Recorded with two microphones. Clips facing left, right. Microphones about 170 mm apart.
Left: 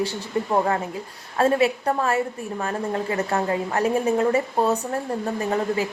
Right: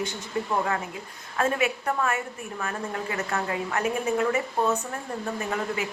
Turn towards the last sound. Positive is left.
turn(degrees=35)  # may be behind; listen again after turning